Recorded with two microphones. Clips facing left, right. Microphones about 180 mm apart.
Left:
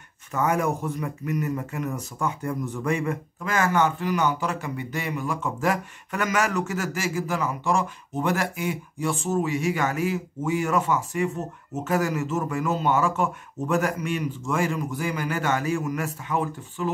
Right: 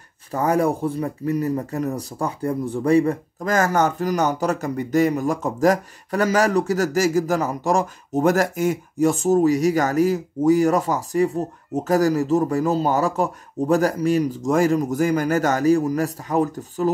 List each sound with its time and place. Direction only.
0.3 s speech: 35° right (ahead or behind)